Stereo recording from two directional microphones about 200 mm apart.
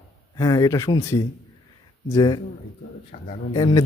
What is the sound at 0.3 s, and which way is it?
A man's voice, 15° left (ahead or behind).